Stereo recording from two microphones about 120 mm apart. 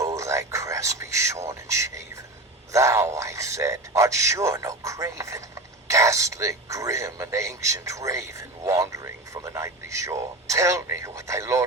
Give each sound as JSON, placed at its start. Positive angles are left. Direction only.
{"t": 0.0, "sound": "speech", "side_deg": -25}